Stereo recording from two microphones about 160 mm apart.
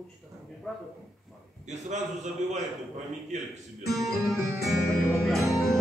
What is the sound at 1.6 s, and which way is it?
Speech, 45° right (ahead or behind).